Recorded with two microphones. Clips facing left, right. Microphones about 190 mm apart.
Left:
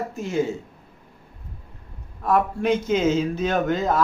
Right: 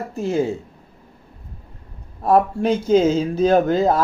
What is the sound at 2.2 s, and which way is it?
Speech, 30° right (ahead or behind).